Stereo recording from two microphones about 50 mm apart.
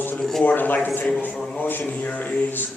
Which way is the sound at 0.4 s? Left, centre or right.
Left.